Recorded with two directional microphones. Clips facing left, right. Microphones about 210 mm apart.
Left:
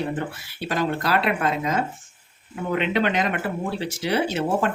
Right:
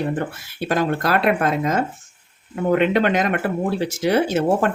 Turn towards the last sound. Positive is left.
turn(degrees=-45)  # may be behind; listen again after turning